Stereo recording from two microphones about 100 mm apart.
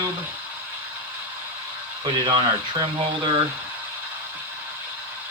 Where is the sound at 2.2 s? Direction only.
55° right (ahead or behind).